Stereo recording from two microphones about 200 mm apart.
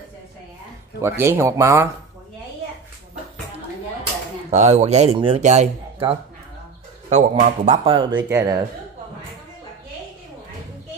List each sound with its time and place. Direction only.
1.0 s speech: 10° right (ahead or behind)
4.5 s speech: 35° right (ahead or behind)
8.3 s speech: 10° right (ahead or behind)